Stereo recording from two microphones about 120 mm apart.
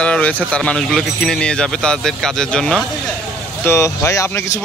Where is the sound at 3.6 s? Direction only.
20° left (ahead or behind).